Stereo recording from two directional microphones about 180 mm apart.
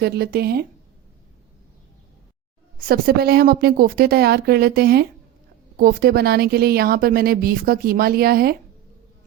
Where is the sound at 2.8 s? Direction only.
55° right (ahead or behind).